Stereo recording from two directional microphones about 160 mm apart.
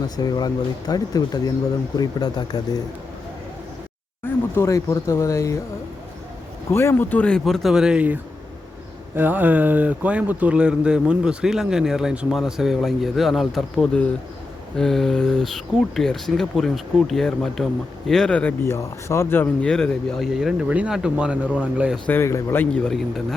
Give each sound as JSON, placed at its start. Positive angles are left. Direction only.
{"t": 0.2, "sound": "speech", "side_deg": 25}
{"t": 4.5, "sound": "speech", "side_deg": 20}
{"t": 6.7, "sound": "speech", "side_deg": 15}
{"t": 21.9, "sound": "speech", "side_deg": 10}
{"t": 22.7, "sound": "speech", "side_deg": 5}